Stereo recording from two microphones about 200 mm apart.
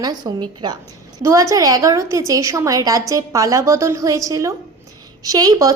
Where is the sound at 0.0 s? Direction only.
20° right (ahead or behind).